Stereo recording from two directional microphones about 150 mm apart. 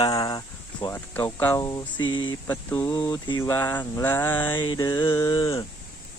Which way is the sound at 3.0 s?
25° left (ahead or behind).